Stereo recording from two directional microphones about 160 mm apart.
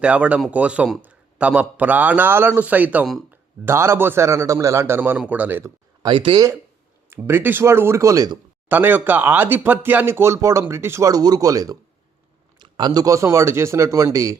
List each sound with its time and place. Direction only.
0.0 s a man's voice: 10° right (ahead or behind)
3.7 s a man's voice: 15° right (ahead or behind)
6.0 s speech: 30° right (ahead or behind)
7.1 s a man's voice: 15° right (ahead or behind)
8.7 s a man's voice: 10° right (ahead or behind)